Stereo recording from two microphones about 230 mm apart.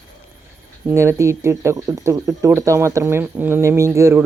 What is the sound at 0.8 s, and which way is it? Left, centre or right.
Speech, centre.